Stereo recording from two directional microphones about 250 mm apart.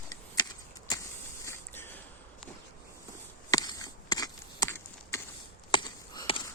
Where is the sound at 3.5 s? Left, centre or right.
Centre.